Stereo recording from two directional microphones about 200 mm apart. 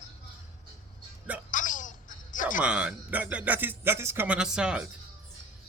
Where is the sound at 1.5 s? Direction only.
40° left (ahead or behind).